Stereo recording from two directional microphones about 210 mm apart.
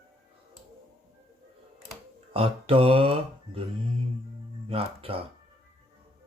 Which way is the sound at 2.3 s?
25° right (ahead or behind).